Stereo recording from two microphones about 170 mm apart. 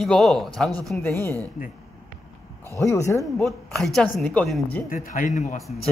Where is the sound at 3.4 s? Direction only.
Centre (ahead or behind).